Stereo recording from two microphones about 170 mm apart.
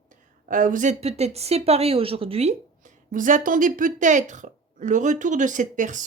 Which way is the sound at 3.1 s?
50° right (ahead or behind).